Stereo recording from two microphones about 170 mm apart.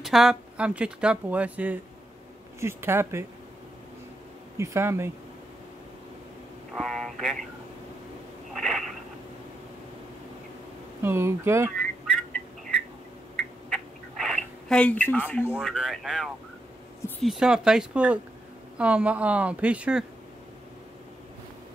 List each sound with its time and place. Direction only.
0.0 s speech: centre (ahead or behind)
4.6 s speech: 15° right (ahead or behind)
6.7 s speech: 5° left (ahead or behind)
8.5 s a sound: centre (ahead or behind)
11.0 s speech: 15° right (ahead or behind)
14.1 s a sound: 5° left (ahead or behind)
15.5 s speech: centre (ahead or behind)